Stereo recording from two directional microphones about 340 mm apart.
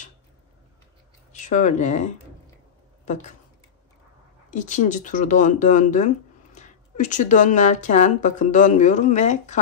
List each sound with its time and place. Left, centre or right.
1.3 s speech: left
4.5 s speech: left